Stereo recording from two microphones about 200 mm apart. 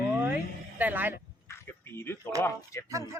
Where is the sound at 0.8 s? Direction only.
10° right (ahead or behind).